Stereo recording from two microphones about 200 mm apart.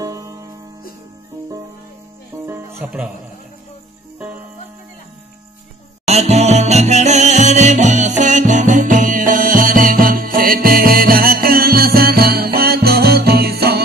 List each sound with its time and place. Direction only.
0.0 s music: 15° right (ahead or behind)
2.3 s music: 10° right (ahead or behind)
6.0 s music: 35° right (ahead or behind); by 13.8 s 50° right (ahead or behind)